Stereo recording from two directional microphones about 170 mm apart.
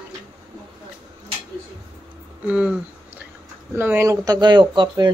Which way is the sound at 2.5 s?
10° right (ahead or behind).